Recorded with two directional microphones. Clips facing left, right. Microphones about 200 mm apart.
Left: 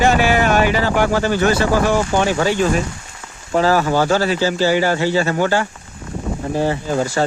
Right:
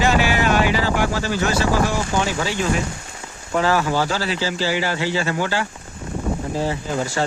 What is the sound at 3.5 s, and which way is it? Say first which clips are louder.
Speech: left 4 dB; 40° left (ahead or behind).